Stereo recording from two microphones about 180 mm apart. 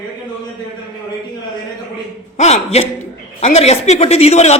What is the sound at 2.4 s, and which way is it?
A man's voice, 35° left (ahead or behind).